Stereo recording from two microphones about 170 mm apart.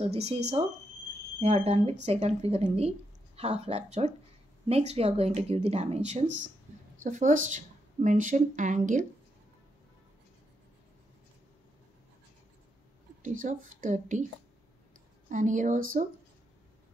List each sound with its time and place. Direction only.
0.0 s speech: 35° right (ahead or behind)
1.4 s a woman's voice: 40° right (ahead or behind)
13.2 s speech: 50° right (ahead or behind)
15.2 s speech: 50° right (ahead or behind)